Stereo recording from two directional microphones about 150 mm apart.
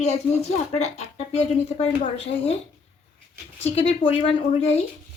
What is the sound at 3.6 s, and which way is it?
A woman's voice, 40° left (ahead or behind).